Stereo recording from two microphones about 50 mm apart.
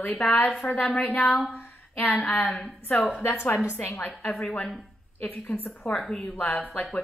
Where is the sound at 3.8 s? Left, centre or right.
Left.